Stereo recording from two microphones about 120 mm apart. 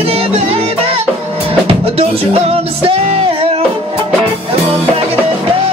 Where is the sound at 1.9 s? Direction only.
55° right (ahead or behind).